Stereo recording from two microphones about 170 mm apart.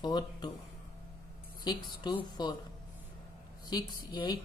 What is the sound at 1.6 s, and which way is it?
Speech, 25° left (ahead or behind).